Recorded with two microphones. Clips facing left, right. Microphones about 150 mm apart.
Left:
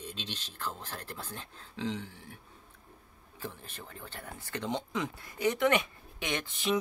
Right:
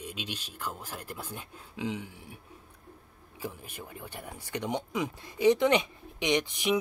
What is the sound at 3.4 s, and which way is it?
Speech, 10° right (ahead or behind).